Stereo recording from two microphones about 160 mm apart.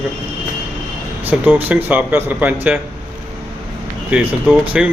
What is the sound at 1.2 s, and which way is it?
Speech, 10° right (ahead or behind).